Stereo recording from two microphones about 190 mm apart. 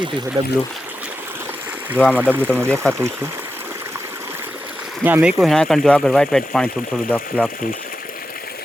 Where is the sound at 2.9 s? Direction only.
15° right (ahead or behind); by 6.5 s 5° left (ahead or behind).